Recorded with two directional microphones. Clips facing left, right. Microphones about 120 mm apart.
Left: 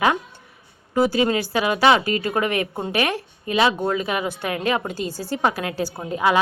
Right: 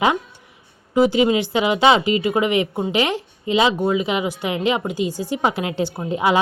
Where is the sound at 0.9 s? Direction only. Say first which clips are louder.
Right 3 dB; 20° right (ahead or behind).